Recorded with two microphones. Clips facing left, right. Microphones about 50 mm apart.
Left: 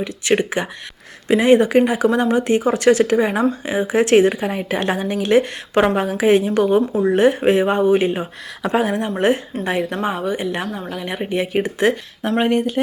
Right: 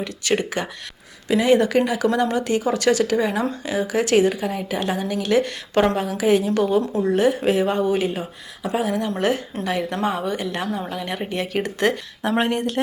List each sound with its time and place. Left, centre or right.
0.3 s a woman's voice: left
5.7 s speech: centre
6.0 s a woman's voice: left
8.6 s speech: left
9.0 s speech: left
9.9 s speech: centre
10.7 s a woman's voice: centre